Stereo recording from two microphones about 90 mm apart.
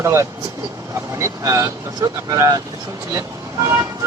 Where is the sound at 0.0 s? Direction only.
30° right (ahead or behind).